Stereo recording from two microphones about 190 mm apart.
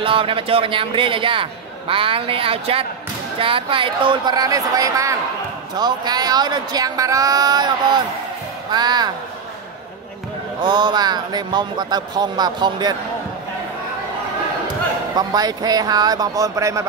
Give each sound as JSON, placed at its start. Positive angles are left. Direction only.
{"t": 0.0, "sound": "a man's voice", "side_deg": -30}
{"t": 10.6, "sound": "a man's voice", "side_deg": -25}
{"t": 15.1, "sound": "a man's voice", "side_deg": -20}